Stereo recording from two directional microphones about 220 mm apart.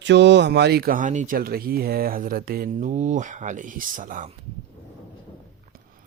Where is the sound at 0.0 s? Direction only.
50° right (ahead or behind); by 4.4 s 35° right (ahead or behind).